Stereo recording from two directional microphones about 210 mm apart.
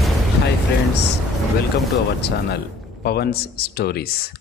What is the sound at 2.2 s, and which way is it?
A man's voice, 50° left (ahead or behind).